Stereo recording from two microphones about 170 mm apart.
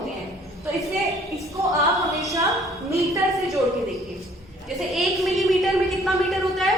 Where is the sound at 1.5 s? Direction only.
20° right (ahead or behind).